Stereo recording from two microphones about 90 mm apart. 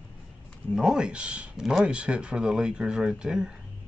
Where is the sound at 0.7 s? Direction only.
5° right (ahead or behind).